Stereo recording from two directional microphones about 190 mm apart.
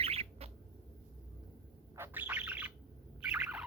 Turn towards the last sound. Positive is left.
turn(degrees=-10)  # may be behind; listen again after turning